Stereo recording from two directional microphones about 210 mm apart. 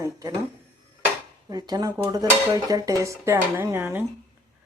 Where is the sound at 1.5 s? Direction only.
20° right (ahead or behind).